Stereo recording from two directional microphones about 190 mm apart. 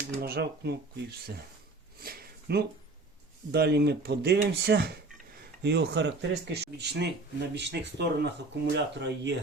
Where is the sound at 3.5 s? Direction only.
55° right (ahead or behind).